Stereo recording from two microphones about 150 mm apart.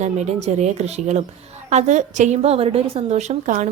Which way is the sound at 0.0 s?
50° right (ahead or behind).